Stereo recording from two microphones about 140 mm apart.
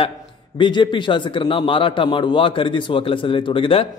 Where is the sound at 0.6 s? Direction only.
35° left (ahead or behind).